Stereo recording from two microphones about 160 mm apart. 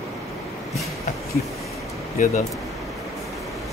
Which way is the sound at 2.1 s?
50° left (ahead or behind).